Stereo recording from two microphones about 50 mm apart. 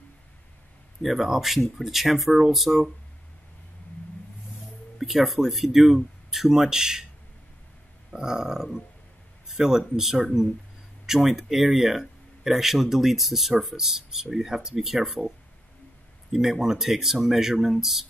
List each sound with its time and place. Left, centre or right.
1.0 s speech: centre
4.9 s speech: centre
8.1 s speech: centre